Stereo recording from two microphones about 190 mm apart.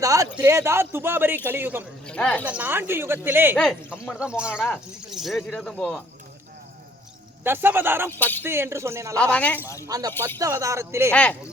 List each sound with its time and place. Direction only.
0.0 s speech: 15° right (ahead or behind)
2.0 s speech: 5° left (ahead or behind)
2.4 s speech: 5° right (ahead or behind)
3.6 s speech: 5° left (ahead or behind)
7.4 s speech: 10° right (ahead or behind)
8.2 s speech: 10° left (ahead or behind)
8.4 s speech: 15° right (ahead or behind)
9.1 s speech: 5° left (ahead or behind)
9.8 s speech: 20° right (ahead or behind)
11.1 s speech: 5° left (ahead or behind)